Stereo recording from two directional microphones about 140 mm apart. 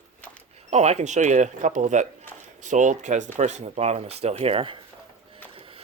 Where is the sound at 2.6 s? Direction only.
60° right (ahead or behind); by 4.8 s 40° right (ahead or behind).